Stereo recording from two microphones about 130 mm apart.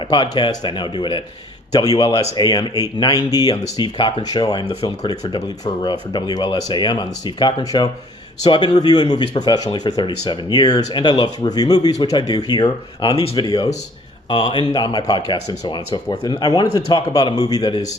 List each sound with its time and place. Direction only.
0.1 s speech: 35° left (ahead or behind)